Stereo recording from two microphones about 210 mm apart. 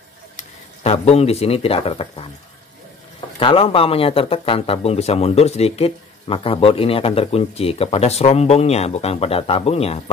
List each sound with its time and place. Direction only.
0.4 s speech: 30° left (ahead or behind)
3.3 s speech: 25° left (ahead or behind)